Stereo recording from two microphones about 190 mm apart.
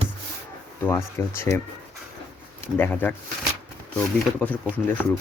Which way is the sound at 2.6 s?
10° left (ahead or behind).